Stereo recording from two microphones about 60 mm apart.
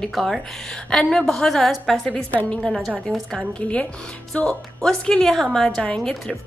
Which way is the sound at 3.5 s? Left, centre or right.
Left.